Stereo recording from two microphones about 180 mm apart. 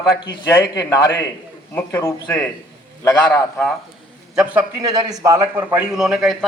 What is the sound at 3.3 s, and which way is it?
Speech, 10° left (ahead or behind).